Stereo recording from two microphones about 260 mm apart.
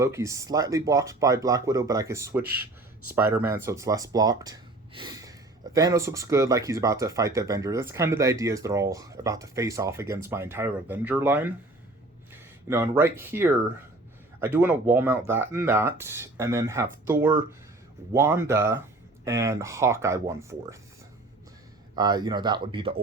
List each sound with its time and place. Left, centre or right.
0.0 s speech: centre
21.9 s speech: centre